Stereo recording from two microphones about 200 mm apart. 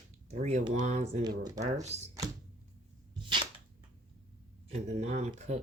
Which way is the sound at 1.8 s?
35° right (ahead or behind).